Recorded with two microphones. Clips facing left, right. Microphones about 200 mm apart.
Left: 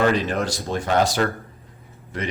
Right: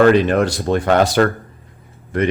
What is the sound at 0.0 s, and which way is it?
Speech, 60° right (ahead or behind).